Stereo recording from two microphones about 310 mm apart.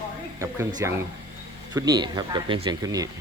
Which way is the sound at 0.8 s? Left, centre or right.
Centre.